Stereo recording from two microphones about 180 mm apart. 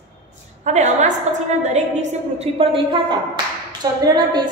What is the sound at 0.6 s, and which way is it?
A woman's voice, 40° right (ahead or behind).